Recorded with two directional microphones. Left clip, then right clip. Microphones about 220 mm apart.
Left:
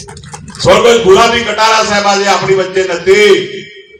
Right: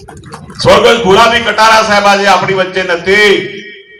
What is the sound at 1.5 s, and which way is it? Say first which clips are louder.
A man's voice: right 3 dB; 35° right (ahead or behind).